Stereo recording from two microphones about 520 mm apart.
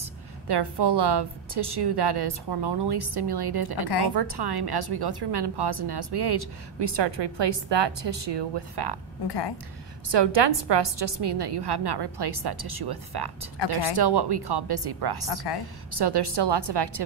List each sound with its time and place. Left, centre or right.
0.0 s a woman's voice: right
9.2 s a woman's voice: left
10.0 s a woman's voice: right